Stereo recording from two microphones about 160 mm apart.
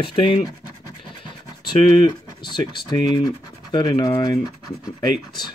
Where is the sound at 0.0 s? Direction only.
35° left (ahead or behind).